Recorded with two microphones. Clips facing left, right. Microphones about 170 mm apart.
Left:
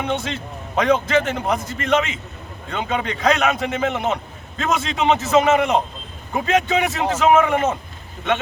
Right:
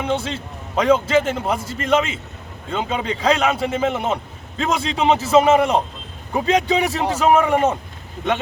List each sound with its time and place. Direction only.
0.1 s a man's voice: 30° right (ahead or behind)